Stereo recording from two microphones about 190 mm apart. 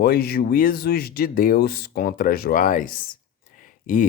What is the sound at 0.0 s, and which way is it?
Speech, 55° left (ahead or behind).